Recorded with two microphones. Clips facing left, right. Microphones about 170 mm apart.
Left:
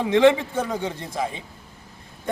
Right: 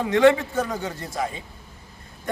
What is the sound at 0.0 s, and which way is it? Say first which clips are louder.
A man's voice: left 1 dB; 20° left (ahead or behind).